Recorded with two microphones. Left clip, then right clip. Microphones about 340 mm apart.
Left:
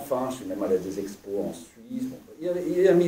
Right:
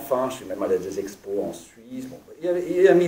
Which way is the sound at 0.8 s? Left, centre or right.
Right.